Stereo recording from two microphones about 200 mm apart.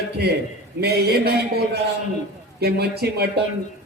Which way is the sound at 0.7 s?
50° right (ahead or behind).